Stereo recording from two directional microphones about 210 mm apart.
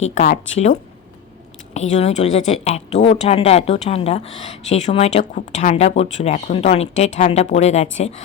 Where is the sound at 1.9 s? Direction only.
30° left (ahead or behind).